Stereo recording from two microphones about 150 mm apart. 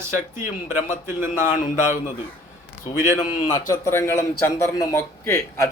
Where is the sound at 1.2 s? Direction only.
60° left (ahead or behind).